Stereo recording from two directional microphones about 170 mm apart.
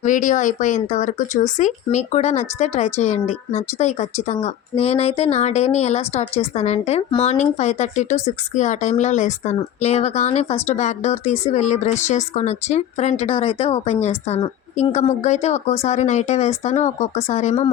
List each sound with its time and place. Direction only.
0.0 s speech: 50° left (ahead or behind)
14.9 s speech: 45° left (ahead or behind)